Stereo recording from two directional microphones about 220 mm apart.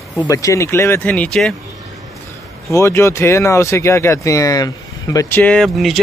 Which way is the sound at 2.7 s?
15° left (ahead or behind).